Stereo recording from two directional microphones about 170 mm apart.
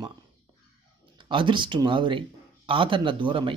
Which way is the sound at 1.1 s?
30° right (ahead or behind).